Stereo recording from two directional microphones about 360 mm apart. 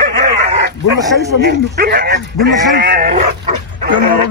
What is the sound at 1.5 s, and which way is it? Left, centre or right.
Speech, right.